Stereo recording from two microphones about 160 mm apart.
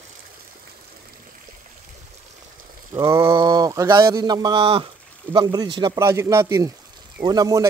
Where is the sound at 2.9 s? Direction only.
15° right (ahead or behind).